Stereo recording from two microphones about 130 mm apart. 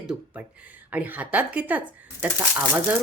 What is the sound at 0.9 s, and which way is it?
Speech, 15° right (ahead or behind).